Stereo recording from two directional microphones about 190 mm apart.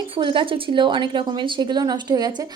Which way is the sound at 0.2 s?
25° right (ahead or behind).